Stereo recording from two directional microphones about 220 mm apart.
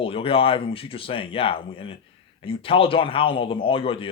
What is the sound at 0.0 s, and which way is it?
Speech, 25° left (ahead or behind).